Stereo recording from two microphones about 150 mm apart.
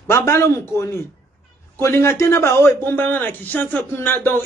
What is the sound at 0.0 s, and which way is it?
A man's voice, 20° left (ahead or behind).